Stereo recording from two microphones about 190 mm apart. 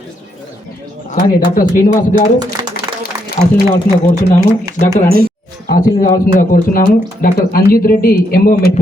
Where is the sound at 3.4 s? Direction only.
35° left (ahead or behind).